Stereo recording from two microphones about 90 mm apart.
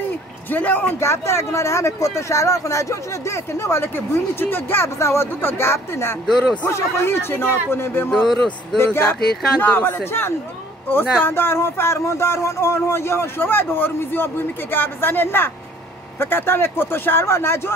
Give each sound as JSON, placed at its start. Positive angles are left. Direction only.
{"t": 0.5, "sound": "speech", "side_deg": 20}
{"t": 0.9, "sound": "speech", "side_deg": 30}
{"t": 6.2, "sound": "speech", "side_deg": 5}
{"t": 6.7, "sound": "speech", "side_deg": 25}
{"t": 8.1, "sound": "speech", "side_deg": 5}
{"t": 8.7, "sound": "speech", "side_deg": 25}